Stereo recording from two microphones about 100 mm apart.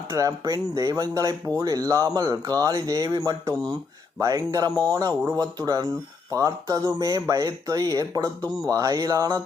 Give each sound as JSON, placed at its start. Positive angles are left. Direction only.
{"t": 0.1, "sound": "speech", "side_deg": -40}